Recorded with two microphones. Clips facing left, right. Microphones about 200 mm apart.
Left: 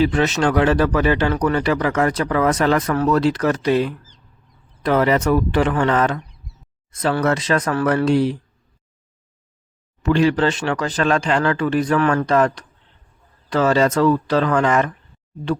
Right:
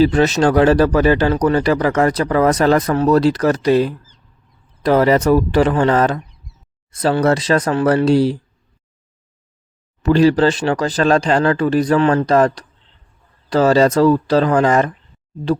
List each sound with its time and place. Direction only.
0.0 s speech: 35° right (ahead or behind)
10.0 s speech: 35° right (ahead or behind)